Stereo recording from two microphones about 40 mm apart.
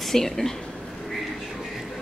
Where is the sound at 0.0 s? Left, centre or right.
Centre.